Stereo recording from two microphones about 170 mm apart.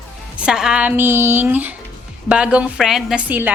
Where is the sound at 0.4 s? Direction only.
5° right (ahead or behind).